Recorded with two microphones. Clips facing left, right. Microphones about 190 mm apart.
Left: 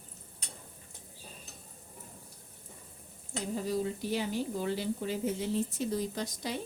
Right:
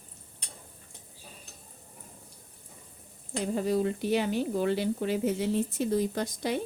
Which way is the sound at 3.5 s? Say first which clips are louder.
Right 5 dB; 65° right (ahead or behind).